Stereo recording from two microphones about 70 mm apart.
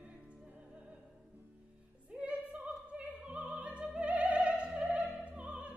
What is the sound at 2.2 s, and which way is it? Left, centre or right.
Opera, centre.